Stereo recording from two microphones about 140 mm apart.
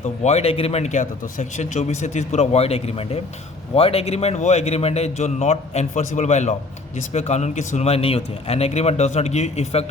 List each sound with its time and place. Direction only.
0.0 s a man's voice: 50° left (ahead or behind)